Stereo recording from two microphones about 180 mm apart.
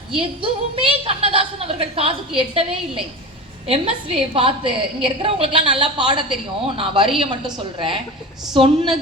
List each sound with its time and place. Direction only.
0.1 s a woman's voice: 30° right (ahead or behind)